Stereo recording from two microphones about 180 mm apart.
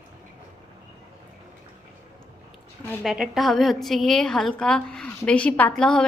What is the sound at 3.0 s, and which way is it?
A woman's voice, 5° right (ahead or behind).